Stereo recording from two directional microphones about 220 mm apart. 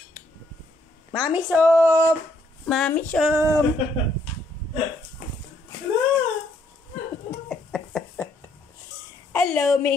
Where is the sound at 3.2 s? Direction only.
10° right (ahead or behind).